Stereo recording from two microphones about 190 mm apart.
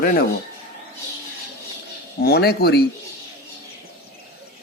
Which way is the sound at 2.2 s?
55° left (ahead or behind).